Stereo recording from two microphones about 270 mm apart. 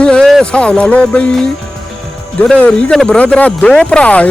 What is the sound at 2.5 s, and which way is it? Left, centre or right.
Speech, centre.